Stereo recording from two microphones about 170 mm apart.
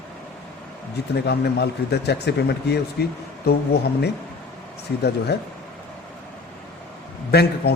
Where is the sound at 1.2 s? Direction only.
75° left (ahead or behind).